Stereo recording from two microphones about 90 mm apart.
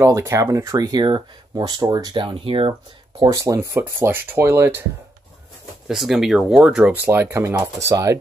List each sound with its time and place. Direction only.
0.0 s speech: 35° right (ahead or behind)
2.1 s speech: 75° right (ahead or behind)
3.3 s speech: 40° right (ahead or behind)
3.7 s speech: 25° right (ahead or behind)
5.9 s speech: 5° right (ahead or behind)
6.9 s speech: 25° right (ahead or behind)